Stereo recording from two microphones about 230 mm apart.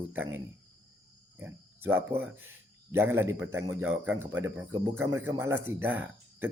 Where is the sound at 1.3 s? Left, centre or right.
Centre.